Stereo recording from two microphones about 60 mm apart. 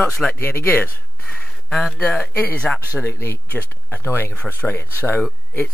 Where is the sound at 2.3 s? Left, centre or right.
Left.